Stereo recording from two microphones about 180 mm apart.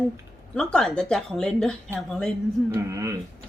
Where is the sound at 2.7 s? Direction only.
15° right (ahead or behind).